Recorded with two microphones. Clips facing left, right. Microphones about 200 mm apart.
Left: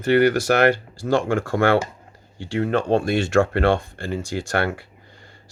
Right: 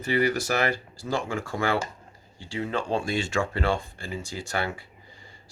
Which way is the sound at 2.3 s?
70° left (ahead or behind).